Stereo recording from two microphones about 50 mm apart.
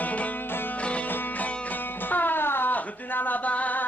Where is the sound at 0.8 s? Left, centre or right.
Left.